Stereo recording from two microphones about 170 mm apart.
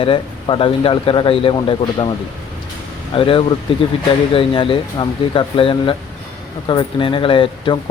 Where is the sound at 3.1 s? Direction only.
30° left (ahead or behind).